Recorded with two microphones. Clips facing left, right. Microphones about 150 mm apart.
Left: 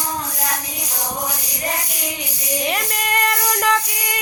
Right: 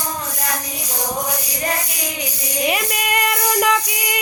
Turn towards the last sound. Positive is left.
turn(degrees=-10)  # may be behind; listen again after turning